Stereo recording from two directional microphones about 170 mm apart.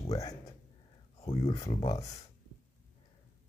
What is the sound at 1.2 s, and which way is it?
Speech, 35° left (ahead or behind).